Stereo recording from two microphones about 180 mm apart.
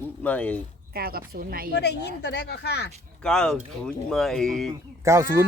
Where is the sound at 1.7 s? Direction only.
70° left (ahead or behind).